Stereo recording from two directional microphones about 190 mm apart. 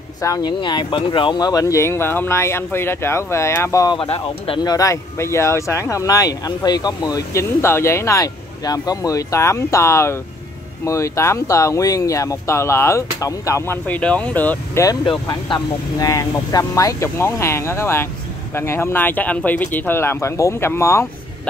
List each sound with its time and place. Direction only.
0.2 s speech: 20° left (ahead or behind)
4.7 s speech: 15° left (ahead or behind)
14.9 s speech: 20° left (ahead or behind)